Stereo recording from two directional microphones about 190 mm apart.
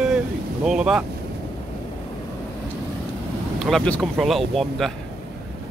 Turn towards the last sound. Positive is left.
turn(degrees=0)  # may be behind; listen again after turning